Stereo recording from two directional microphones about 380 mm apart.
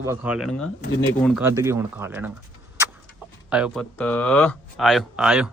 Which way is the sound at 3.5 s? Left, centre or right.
Centre.